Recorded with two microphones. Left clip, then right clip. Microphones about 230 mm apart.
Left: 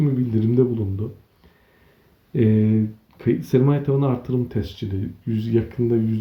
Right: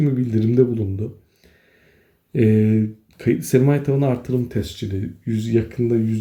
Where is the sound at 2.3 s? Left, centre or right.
Centre.